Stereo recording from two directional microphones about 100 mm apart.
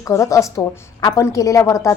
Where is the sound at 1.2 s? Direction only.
35° left (ahead or behind).